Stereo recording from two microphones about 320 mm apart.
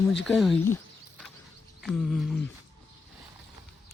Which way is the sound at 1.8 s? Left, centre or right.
Centre.